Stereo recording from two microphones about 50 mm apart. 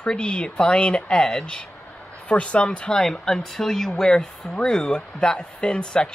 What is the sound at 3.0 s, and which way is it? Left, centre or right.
Speech, centre.